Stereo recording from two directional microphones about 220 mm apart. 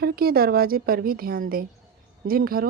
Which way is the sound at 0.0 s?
45° right (ahead or behind).